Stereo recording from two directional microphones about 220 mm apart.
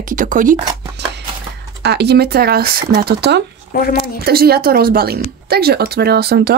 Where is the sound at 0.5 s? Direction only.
20° right (ahead or behind).